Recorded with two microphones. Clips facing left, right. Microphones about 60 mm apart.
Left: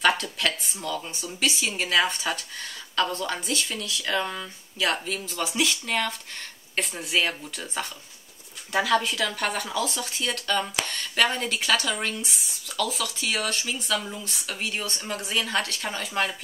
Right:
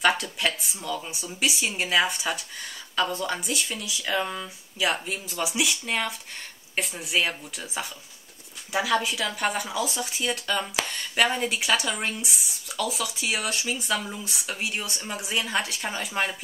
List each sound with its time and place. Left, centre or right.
0.0 s speech: centre